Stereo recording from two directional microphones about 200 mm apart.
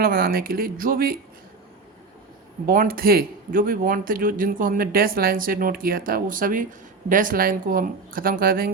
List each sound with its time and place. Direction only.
0.0 s speech: 45° right (ahead or behind)
2.6 s speech: 45° right (ahead or behind)